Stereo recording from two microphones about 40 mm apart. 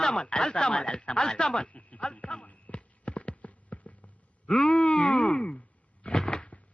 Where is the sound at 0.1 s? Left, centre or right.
Left.